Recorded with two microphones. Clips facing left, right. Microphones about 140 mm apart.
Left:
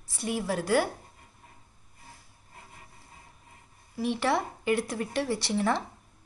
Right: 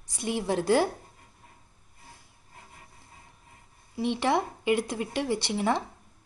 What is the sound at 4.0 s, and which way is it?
Speech, 20° right (ahead or behind).